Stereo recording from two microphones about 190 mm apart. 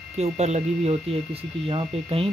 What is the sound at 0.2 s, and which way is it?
Speech, 35° right (ahead or behind).